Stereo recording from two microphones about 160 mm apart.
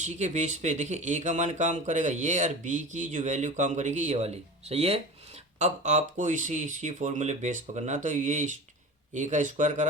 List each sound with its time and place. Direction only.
0.0 s speech: 45° right (ahead or behind)